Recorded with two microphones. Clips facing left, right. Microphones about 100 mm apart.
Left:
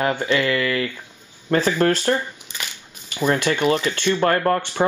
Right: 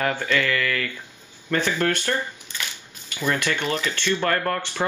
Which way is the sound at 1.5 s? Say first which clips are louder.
Left 5 dB; 30° left (ahead or behind).